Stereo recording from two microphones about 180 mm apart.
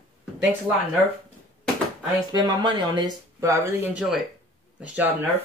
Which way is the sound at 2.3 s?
25° right (ahead or behind).